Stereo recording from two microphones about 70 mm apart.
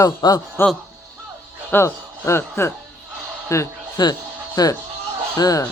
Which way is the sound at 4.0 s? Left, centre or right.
Left.